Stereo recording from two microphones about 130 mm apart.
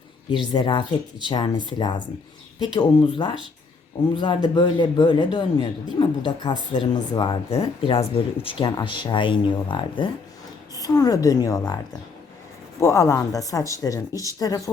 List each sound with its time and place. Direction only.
0.5 s speech: 35° left (ahead or behind)
10.8 s speech: 30° left (ahead or behind)
12.8 s speech: 25° left (ahead or behind)